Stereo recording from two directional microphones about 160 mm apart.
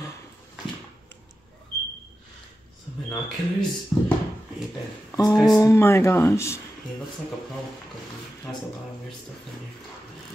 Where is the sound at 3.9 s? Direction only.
20° left (ahead or behind).